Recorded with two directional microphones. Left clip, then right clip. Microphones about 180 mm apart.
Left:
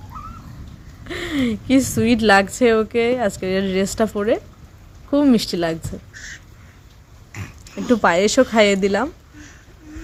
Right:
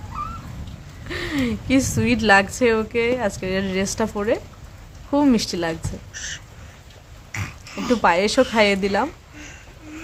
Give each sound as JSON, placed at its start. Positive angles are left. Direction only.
{"t": 1.0, "sound": "a woman's voice", "side_deg": 25}
{"t": 7.9, "sound": "a woman's voice", "side_deg": 30}